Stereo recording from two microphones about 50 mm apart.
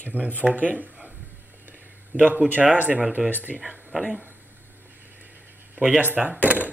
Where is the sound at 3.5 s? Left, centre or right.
Centre.